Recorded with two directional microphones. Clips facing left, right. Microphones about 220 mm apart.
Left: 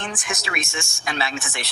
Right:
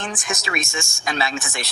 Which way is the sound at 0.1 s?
45° right (ahead or behind).